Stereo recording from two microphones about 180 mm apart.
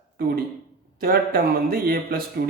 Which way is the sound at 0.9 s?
55° right (ahead or behind).